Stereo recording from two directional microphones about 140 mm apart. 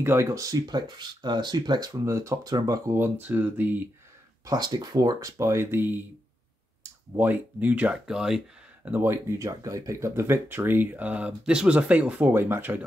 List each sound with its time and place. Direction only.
0.0 s speech: 20° right (ahead or behind)
4.5 s speech: 30° right (ahead or behind); by 8.4 s 5° right (ahead or behind)
8.8 s speech: 15° right (ahead or behind)